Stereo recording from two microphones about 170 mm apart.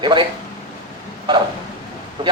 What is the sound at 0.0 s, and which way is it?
Speech, 30° right (ahead or behind).